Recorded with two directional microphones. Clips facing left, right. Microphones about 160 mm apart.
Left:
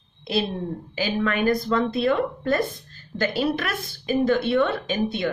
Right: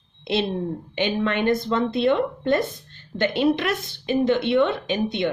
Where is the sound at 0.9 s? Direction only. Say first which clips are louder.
Right 1 dB; 25° right (ahead or behind).